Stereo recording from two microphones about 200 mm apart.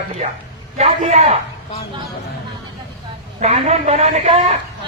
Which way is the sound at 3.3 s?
30° right (ahead or behind).